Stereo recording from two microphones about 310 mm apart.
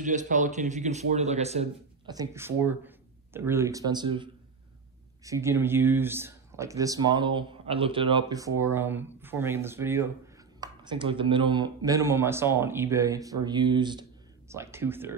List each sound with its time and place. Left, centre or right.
0.0 s a man's voice: right; by 15.1 s centre